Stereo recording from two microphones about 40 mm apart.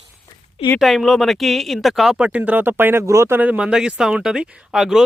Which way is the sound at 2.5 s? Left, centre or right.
Right.